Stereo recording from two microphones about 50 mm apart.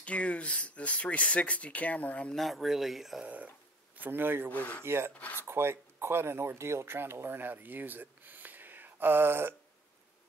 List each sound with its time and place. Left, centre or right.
0.0 s speech: left
2.3 s speech: centre
4.0 s speech: right
4.5 s speech: left
4.8 s speech: right
7.0 s speech: right